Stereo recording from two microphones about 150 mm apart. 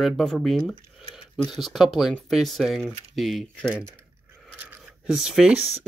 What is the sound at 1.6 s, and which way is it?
Speech, centre (ahead or behind).